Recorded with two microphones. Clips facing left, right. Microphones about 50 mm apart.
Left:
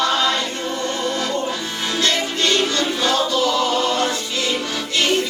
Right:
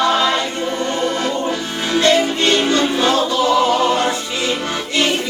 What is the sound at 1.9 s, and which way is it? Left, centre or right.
Music, right.